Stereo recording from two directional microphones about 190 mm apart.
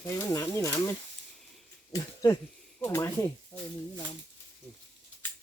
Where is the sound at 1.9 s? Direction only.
20° left (ahead or behind).